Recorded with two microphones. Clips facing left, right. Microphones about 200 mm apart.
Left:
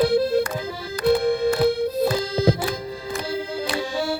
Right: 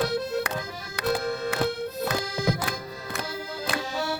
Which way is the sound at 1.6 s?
30° left (ahead or behind).